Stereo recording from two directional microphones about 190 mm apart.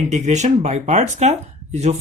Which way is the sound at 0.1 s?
35° right (ahead or behind).